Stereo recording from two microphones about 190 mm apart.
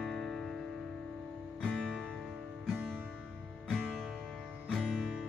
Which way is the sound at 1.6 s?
5° left (ahead or behind).